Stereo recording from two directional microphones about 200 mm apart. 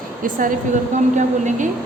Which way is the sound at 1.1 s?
40° right (ahead or behind).